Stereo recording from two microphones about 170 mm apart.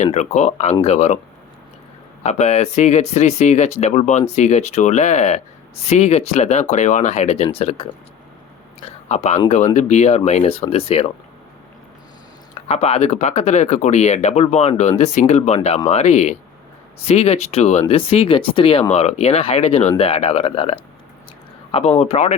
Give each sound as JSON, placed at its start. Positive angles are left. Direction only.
{"t": 0.0, "sound": "speech", "side_deg": 45}
{"t": 2.2, "sound": "speech", "side_deg": 40}
{"t": 9.0, "sound": "speech", "side_deg": 40}
{"t": 12.6, "sound": "speech", "side_deg": 35}
{"t": 21.9, "sound": "speech", "side_deg": 40}